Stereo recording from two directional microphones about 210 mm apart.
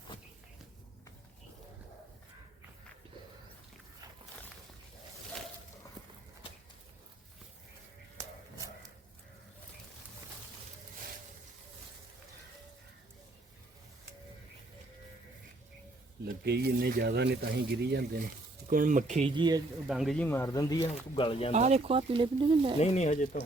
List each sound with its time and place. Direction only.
6.0 s walk: 20° right (ahead or behind)
8.2 s a sound: 15° right (ahead or behind)
16.2 s speech: 50° right (ahead or behind)
19.4 s speech: 20° right (ahead or behind)
19.9 s speech: centre (ahead or behind); by 21.5 s 25° left (ahead or behind)
21.5 s speech: 30° right (ahead or behind)
22.8 s speech: 35° left (ahead or behind)